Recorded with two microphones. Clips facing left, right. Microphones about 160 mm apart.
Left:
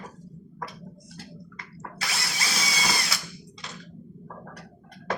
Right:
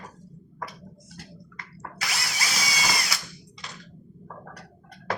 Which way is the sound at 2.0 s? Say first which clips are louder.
Right 1 dB; 25° left (ahead or behind).